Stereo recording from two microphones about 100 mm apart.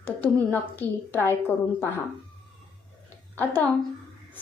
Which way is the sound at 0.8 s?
30° right (ahead or behind).